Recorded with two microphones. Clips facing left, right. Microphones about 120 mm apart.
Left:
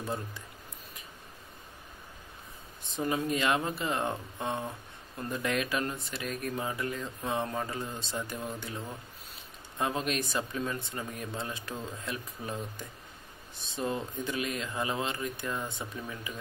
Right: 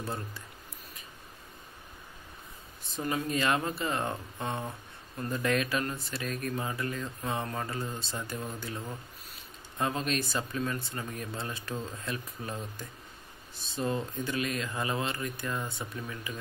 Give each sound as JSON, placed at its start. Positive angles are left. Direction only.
{"t": 0.0, "sound": "speech", "side_deg": 15}
{"t": 3.0, "sound": "speech", "side_deg": 15}
{"t": 15.5, "sound": "speech", "side_deg": 0}